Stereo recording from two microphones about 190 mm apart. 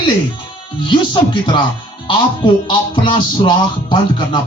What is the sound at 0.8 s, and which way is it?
Speech, 25° left (ahead or behind).